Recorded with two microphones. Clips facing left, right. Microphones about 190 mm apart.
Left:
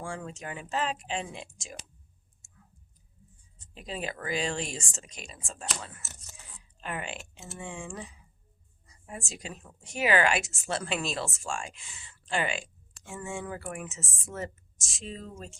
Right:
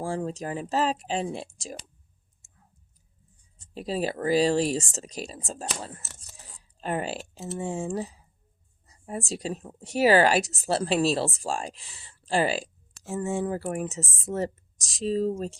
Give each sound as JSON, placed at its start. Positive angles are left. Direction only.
{"t": 0.0, "sound": "speech", "side_deg": -35}
{"t": 3.8, "sound": "speech", "side_deg": -35}